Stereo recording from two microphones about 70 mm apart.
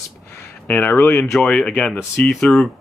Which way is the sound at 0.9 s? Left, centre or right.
Left.